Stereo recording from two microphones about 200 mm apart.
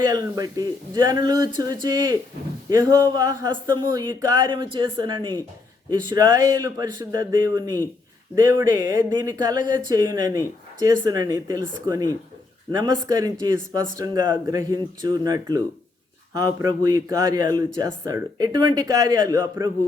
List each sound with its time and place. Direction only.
0.1 s speech: 20° right (ahead or behind)